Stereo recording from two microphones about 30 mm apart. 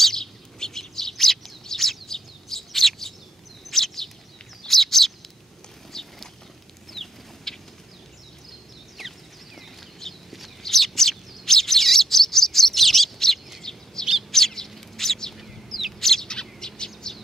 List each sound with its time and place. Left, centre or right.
0.1 s bird: centre
5.9 s a sound: centre
6.9 s chicken: centre
9.0 s a sound: centre
10.0 s a sound: centre
10.6 s bird: centre
13.6 s bird: centre
15.3 s chicken: centre
16.0 s bird: centre
16.3 s bird: left